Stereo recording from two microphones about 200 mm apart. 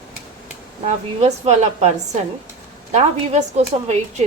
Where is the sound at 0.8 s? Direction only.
35° right (ahead or behind).